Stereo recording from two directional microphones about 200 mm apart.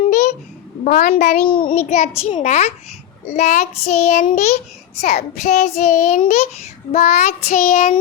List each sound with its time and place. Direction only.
0.0 s a sound: 35° left (ahead or behind)
0.9 s a child's voice: 45° left (ahead or behind)
1.5 s child singing: 25° left (ahead or behind)
2.0 s a child's voice: 35° left (ahead or behind)